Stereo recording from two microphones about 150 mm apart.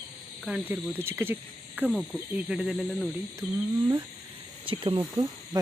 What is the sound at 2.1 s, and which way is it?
Cricket, 5° right (ahead or behind).